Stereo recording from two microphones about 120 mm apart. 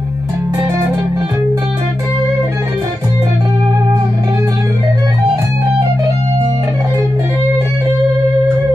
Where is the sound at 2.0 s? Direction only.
25° right (ahead or behind).